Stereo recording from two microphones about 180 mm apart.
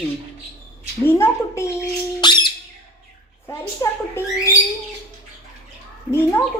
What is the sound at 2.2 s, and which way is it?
Squawk, 25° left (ahead or behind).